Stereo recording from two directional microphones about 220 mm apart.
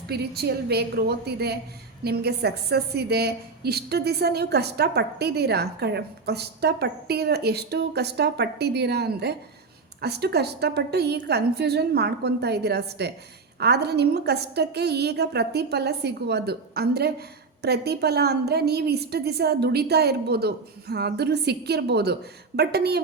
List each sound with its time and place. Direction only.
0.1 s a woman's voice: 45° right (ahead or behind)